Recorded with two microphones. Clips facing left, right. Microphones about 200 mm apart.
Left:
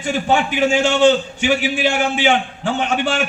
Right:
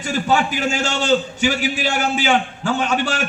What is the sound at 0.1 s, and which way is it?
A man's voice, 40° right (ahead or behind).